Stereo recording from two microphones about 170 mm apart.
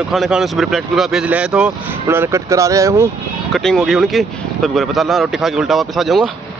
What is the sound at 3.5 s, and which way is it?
Speech, 5° left (ahead or behind).